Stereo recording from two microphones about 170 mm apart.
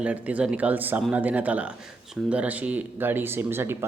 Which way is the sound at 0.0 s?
10° right (ahead or behind).